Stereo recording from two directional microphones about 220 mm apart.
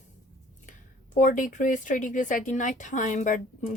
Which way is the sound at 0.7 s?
35° left (ahead or behind).